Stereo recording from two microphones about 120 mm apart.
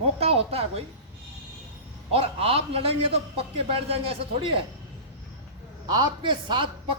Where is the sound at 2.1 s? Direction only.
50° right (ahead or behind).